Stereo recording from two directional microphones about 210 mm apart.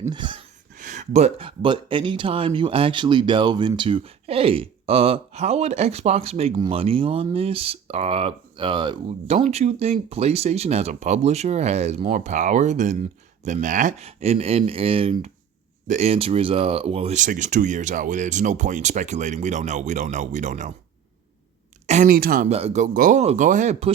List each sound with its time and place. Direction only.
0.0 s speech: 20° right (ahead or behind)
0.8 s speech: 35° right (ahead or behind)
21.8 s speech: 35° right (ahead or behind)